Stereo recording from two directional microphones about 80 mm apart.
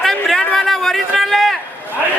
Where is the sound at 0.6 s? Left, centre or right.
Centre.